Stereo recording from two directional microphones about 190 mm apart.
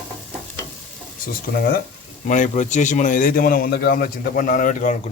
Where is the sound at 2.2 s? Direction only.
40° left (ahead or behind).